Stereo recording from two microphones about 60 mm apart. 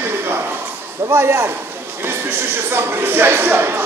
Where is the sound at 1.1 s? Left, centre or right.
Right.